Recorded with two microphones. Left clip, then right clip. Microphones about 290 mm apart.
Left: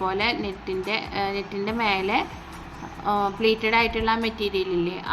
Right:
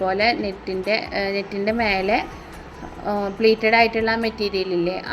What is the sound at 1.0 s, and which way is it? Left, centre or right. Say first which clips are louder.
Speech: right 3 dB; left.